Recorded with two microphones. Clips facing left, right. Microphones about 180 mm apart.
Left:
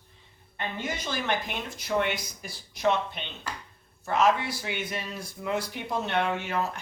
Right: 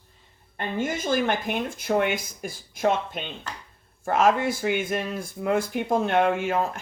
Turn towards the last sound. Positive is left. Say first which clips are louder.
# right 5 dB
turn(degrees=-50)  # may be behind; listen again after turning